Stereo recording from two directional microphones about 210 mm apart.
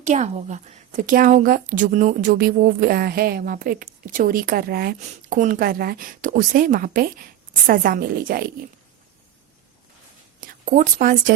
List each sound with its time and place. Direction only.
0.0 s a woman's voice: 35° right (ahead or behind)
10.4 s speech: 35° right (ahead or behind)